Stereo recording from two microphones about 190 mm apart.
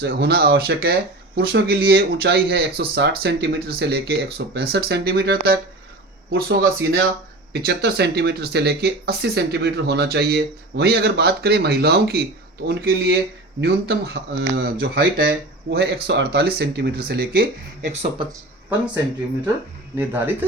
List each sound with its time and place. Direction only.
0.0 s speech: 55° right (ahead or behind)